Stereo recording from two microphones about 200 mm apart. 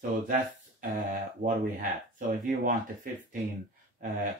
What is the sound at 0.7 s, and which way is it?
Speech, 45° right (ahead or behind).